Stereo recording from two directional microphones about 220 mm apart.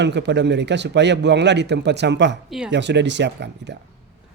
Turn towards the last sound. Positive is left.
turn(degrees=-50)  # may be behind; listen again after turning